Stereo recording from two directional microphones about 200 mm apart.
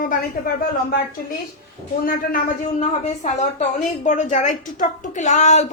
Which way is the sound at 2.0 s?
40° left (ahead or behind).